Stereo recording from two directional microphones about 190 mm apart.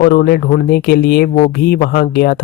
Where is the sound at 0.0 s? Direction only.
55° left (ahead or behind).